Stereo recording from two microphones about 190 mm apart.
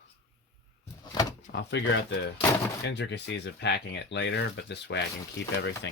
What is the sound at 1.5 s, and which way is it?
Speech, 70° left (ahead or behind).